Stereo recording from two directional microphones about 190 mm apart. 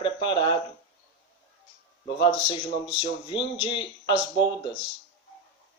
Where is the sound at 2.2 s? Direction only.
25° left (ahead or behind).